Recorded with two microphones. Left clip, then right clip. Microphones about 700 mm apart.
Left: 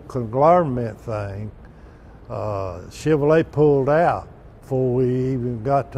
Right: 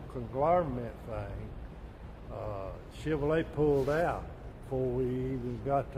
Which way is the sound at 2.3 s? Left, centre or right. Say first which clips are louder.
Left 13 dB; left.